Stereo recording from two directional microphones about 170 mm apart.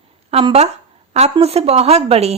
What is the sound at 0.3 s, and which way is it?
Speech, 35° right (ahead or behind).